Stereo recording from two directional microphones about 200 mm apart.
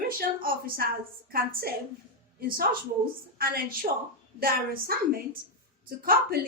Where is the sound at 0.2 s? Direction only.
50° right (ahead or behind).